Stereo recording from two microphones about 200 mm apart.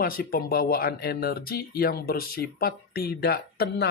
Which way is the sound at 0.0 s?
45° left (ahead or behind).